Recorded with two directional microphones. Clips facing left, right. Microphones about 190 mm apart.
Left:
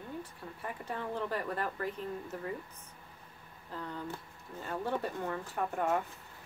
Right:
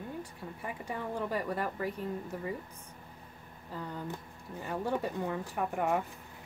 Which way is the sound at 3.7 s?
10° right (ahead or behind).